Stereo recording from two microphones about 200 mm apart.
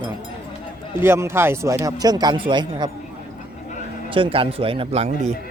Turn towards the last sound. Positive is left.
turn(degrees=-35)  # may be behind; listen again after turning